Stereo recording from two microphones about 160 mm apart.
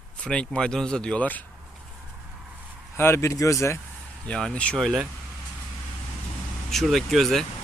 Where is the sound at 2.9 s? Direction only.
15° left (ahead or behind).